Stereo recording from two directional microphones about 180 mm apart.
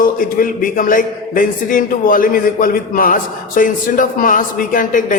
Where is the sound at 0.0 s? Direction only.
50° left (ahead or behind).